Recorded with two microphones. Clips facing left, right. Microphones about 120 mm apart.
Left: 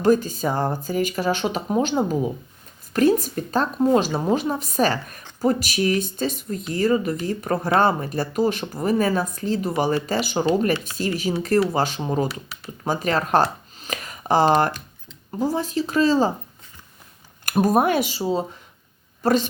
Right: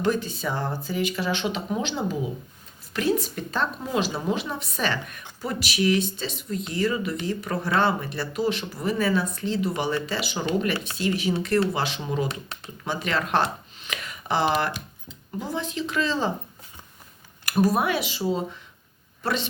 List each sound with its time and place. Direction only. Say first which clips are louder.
0.0 s speech: left 6 dB; 40° left (ahead or behind)
12.3 s speech: left 1 dB; 5° left (ahead or behind)
12.8 s speech: left 5 dB; 40° left (ahead or behind)
17.4 s speech: left 4 dB; 45° left (ahead or behind)
18.2 s speech: left 3 dB; 35° left (ahead or behind)